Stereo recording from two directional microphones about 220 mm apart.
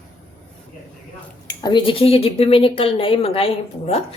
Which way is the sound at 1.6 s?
20° left (ahead or behind).